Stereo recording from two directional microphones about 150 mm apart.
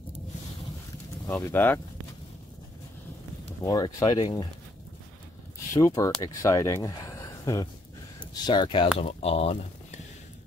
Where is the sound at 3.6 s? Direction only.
25° left (ahead or behind).